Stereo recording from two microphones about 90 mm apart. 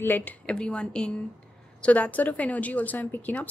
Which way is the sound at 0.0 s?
20° left (ahead or behind).